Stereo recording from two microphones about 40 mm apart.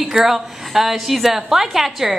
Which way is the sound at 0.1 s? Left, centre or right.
Centre.